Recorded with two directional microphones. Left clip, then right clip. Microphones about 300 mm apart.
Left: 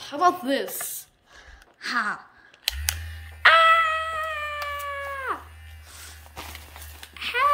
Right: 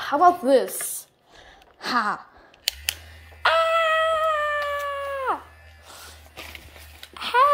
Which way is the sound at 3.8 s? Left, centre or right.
Centre.